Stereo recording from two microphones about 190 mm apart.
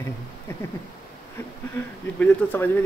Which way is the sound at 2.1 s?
10° left (ahead or behind).